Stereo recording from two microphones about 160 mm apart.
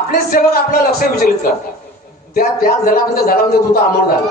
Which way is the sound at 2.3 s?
65° left (ahead or behind).